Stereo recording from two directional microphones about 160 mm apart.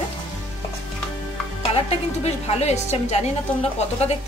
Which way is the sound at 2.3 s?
40° left (ahead or behind).